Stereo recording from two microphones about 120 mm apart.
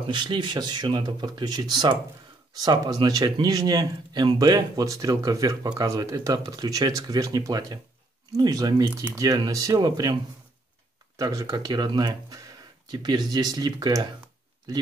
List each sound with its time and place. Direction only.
0.0 s speech: 45° right (ahead or behind)
11.1 s speech: 30° right (ahead or behind)